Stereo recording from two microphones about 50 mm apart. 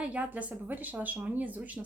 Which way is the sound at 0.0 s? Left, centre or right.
Right.